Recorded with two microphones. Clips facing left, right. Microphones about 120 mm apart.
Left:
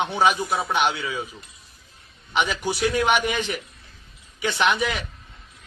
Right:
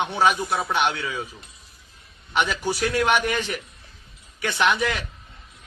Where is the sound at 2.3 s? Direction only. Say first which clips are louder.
Even; 10° left (ahead or behind).